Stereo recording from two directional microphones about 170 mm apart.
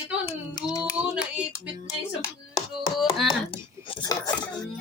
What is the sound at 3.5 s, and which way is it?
Cutlery, 25° left (ahead or behind).